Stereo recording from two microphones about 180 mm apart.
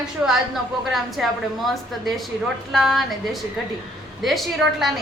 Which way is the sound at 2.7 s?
Centre (ahead or behind).